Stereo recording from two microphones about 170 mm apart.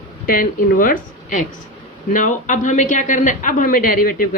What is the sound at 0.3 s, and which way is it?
A man's voice, 55° left (ahead or behind).